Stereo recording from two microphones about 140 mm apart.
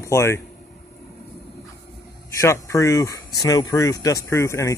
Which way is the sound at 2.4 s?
20° left (ahead or behind).